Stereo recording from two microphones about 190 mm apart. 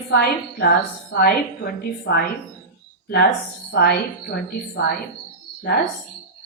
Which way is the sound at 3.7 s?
55° left (ahead or behind).